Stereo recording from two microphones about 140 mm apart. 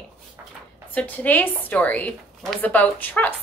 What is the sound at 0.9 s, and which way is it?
A woman's voice, 10° left (ahead or behind).